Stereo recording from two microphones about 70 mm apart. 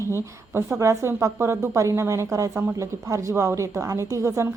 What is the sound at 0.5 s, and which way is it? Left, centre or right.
A woman's voice, right.